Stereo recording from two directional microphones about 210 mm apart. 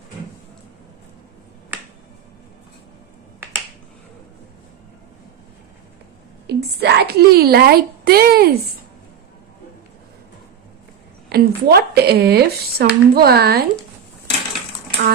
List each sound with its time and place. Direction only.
6.4 s speech: 50° right (ahead or behind)
11.2 s speech: 50° right (ahead or behind)